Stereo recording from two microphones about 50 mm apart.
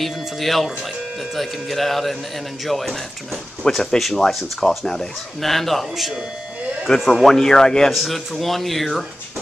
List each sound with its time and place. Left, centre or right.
0.0 s speech: centre
7.2 s speech: centre
7.9 s speech: centre